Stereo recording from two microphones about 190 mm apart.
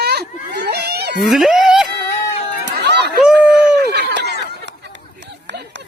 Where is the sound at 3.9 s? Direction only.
60° right (ahead or behind).